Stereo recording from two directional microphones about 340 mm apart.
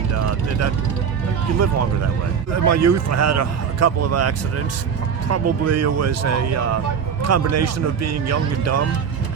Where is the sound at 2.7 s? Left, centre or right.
Right.